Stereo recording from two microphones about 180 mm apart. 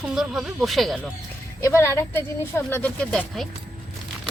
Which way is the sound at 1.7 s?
15° left (ahead or behind).